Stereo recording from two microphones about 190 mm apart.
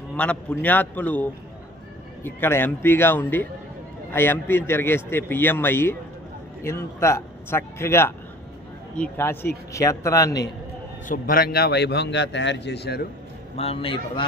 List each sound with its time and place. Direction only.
0.1 s speech: 5° left (ahead or behind)
2.2 s speech: 10° left (ahead or behind)
11.1 s a man's voice: 50° left (ahead or behind)
13.6 s a man's voice: 30° left (ahead or behind)